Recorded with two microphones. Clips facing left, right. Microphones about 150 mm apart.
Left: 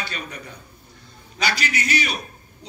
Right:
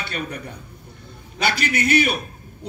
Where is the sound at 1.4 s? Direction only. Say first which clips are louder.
Right 3 dB; 55° right (ahead or behind).